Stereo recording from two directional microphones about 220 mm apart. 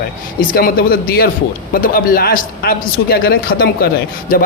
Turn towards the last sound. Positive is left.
turn(degrees=40)  # may be behind; listen again after turning